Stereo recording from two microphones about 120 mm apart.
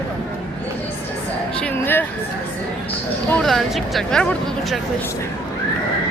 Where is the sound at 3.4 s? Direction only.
Centre (ahead or behind).